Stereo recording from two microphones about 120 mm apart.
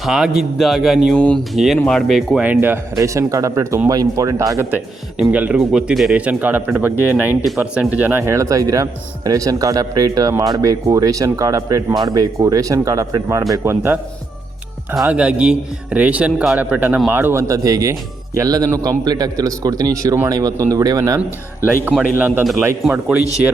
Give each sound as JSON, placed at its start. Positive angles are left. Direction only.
{"t": 0.0, "sound": "speech", "side_deg": 0}
{"t": 2.4, "sound": "a man's voice", "side_deg": -15}
{"t": 5.3, "sound": "a man's voice", "side_deg": -10}
{"t": 15.0, "sound": "a man's voice", "side_deg": -10}
{"t": 21.2, "sound": "a man's voice", "side_deg": -15}